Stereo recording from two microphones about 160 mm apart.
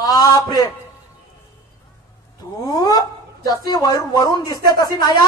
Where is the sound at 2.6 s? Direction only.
25° left (ahead or behind).